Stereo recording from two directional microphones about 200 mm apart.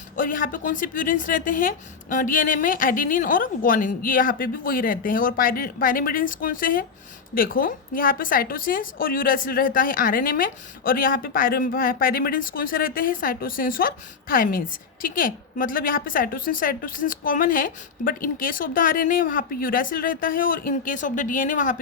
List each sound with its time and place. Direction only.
0.2 s a woman's voice: 45° left (ahead or behind)